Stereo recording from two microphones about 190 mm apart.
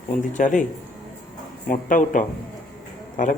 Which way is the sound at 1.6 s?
45° left (ahead or behind).